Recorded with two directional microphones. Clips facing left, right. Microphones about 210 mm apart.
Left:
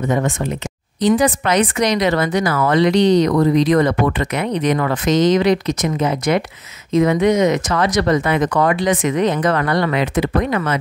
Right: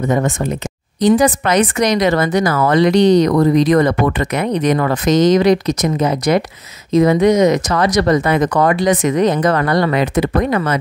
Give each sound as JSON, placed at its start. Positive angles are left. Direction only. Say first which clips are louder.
{"t": 0.1, "sound": "speech", "louder": "right 2 dB", "side_deg": -45}